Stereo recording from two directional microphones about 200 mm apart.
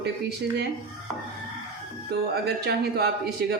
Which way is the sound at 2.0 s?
55° right (ahead or behind).